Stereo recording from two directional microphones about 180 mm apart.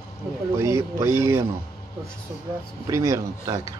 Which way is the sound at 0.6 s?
15° right (ahead or behind).